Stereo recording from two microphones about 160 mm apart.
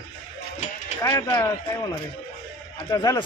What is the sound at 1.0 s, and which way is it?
Speech, 25° left (ahead or behind).